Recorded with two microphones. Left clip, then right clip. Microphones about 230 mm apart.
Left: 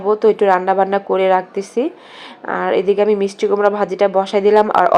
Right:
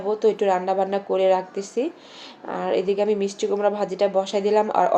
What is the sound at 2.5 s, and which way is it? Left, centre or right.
A woman's voice, left.